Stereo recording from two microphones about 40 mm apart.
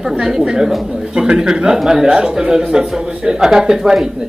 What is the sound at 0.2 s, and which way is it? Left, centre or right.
A man's voice, centre.